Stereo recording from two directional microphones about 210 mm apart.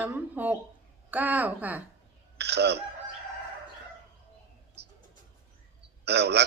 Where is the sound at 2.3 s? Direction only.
50° right (ahead or behind).